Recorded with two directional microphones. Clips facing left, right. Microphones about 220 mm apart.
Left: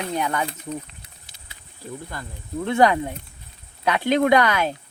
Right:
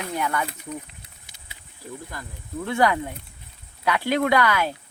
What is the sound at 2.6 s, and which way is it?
Speech, 25° left (ahead or behind).